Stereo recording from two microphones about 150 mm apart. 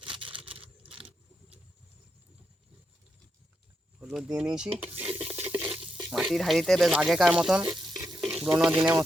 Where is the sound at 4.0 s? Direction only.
5° right (ahead or behind).